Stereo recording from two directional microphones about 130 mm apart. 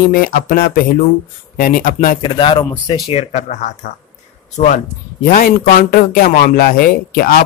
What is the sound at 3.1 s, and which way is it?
Speech, 65° left (ahead or behind).